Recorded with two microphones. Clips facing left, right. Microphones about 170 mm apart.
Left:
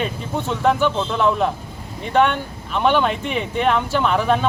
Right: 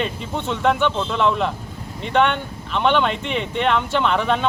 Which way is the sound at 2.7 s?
5° left (ahead or behind).